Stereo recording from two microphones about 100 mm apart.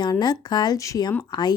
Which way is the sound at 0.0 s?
45° left (ahead or behind).